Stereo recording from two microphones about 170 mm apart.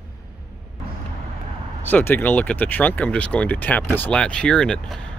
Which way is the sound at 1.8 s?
10° left (ahead or behind).